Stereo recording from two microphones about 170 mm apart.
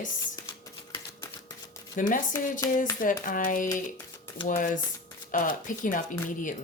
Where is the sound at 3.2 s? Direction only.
55° left (ahead or behind).